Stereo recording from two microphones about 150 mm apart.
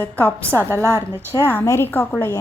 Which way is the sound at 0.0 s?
10° left (ahead or behind).